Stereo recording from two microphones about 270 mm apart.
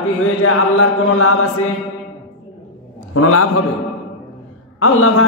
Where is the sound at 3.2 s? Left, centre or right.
Left.